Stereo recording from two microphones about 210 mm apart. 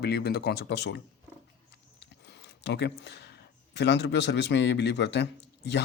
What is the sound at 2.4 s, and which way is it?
A man's voice, 55° left (ahead or behind).